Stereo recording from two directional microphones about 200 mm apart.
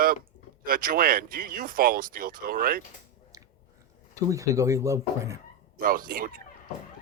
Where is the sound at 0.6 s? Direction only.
45° right (ahead or behind).